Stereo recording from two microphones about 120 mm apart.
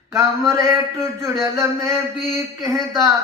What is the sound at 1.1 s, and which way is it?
Speech, 20° right (ahead or behind).